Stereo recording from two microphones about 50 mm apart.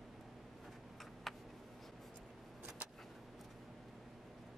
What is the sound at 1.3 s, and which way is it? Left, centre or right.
Tick, centre.